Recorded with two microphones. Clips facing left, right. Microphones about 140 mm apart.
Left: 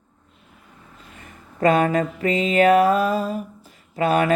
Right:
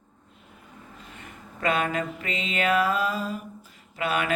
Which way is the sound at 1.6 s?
35° left (ahead or behind).